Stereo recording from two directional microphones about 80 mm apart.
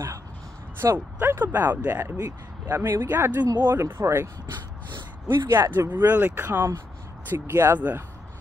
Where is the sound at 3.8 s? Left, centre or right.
Right.